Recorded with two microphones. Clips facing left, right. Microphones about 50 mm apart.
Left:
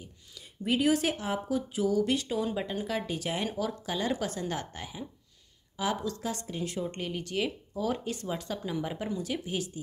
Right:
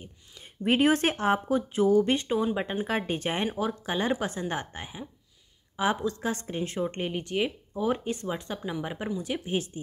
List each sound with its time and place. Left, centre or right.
0.0 s speech: right
3.4 s speech: right